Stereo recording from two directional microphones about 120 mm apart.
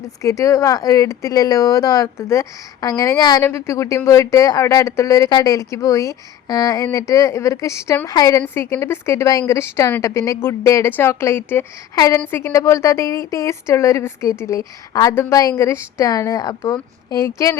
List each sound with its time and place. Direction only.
0.2 s speech: 25° left (ahead or behind)
3.4 s a woman's voice: 20° left (ahead or behind)
8.4 s speech: 20° left (ahead or behind)